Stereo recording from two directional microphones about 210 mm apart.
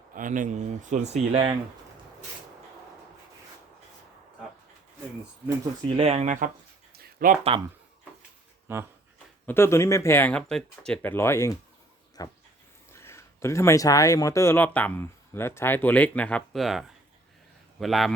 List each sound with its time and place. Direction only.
0.1 s speech: 40° right (ahead or behind)
6.0 s speech: 30° right (ahead or behind)
8.6 s speech: 10° right (ahead or behind)
9.5 s a man's voice: 10° left (ahead or behind)